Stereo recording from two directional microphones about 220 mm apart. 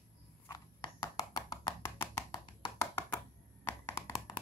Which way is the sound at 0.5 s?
15° left (ahead or behind).